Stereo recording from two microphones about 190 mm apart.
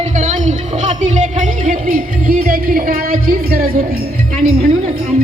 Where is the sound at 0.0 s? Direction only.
40° right (ahead or behind).